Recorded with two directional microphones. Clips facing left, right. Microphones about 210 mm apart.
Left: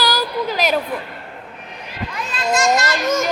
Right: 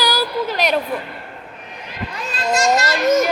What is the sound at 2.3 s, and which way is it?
Children playing, 35° right (ahead or behind).